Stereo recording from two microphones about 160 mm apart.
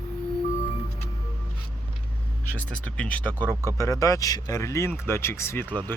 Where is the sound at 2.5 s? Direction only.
10° left (ahead or behind).